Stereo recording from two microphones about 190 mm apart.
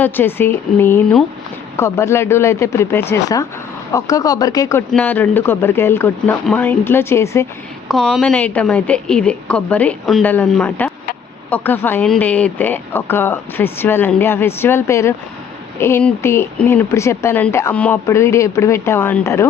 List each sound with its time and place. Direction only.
0.0 s speech: 10° left (ahead or behind)
4.9 s speech: 10° left (ahead or behind)
7.9 s a woman's voice: centre (ahead or behind)